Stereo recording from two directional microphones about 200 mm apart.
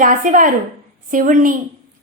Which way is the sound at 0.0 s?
40° right (ahead or behind).